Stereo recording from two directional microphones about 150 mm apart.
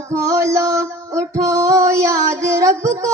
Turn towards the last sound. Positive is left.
turn(degrees=-20)  # may be behind; listen again after turning